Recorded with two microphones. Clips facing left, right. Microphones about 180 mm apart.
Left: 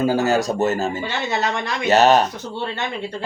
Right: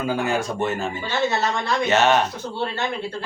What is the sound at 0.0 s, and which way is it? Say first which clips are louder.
Speech: left 5 dB; 40° left (ahead or behind).